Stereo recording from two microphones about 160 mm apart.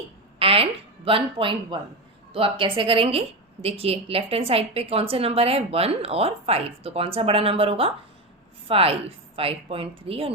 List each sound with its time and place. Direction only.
0.3 s a woman's voice: 35° right (ahead or behind)